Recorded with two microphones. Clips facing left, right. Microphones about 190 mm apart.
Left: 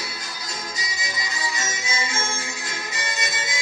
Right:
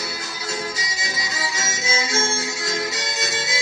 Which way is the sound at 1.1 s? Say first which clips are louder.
Right 1 dB; 90° right.